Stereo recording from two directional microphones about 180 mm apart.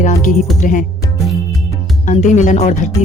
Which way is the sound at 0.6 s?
45° left (ahead or behind).